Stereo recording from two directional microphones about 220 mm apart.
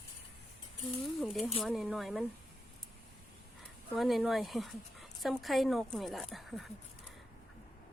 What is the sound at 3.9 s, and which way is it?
A woman's voice, centre (ahead or behind).